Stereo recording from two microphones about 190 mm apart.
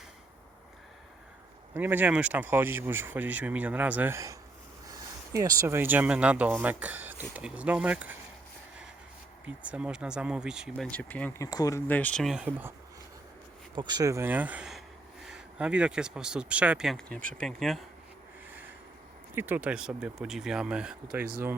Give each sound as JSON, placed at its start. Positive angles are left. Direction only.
{"t": 1.7, "sound": "speech", "side_deg": -10}
{"t": 9.6, "sound": "speech", "side_deg": -5}
{"t": 10.9, "sound": "speech", "side_deg": 10}
{"t": 11.4, "sound": "speech", "side_deg": 20}
{"t": 13.7, "sound": "speech", "side_deg": -20}
{"t": 17.2, "sound": "speech", "side_deg": -45}
{"t": 17.4, "sound": "speech", "side_deg": 0}
{"t": 19.3, "sound": "speech", "side_deg": -10}